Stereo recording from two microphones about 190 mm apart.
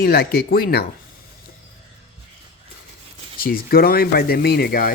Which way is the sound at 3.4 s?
50° left (ahead or behind).